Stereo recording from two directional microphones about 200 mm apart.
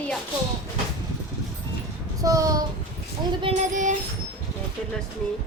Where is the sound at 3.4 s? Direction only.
30° right (ahead or behind).